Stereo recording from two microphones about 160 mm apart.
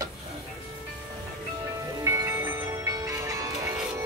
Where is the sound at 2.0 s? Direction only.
20° right (ahead or behind).